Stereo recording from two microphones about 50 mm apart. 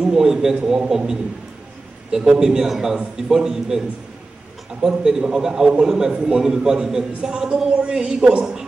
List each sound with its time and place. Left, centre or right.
0.0 s a man's voice: centre
4.8 s a man's voice: centre